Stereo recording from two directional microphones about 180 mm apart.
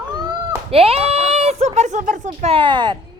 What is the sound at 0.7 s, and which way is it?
Speech, 35° right (ahead or behind).